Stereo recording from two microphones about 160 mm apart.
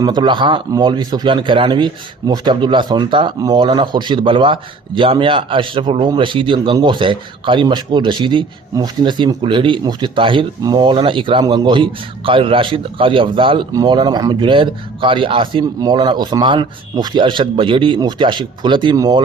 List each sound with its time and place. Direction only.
0.0 s a man's voice: 30° right (ahead or behind)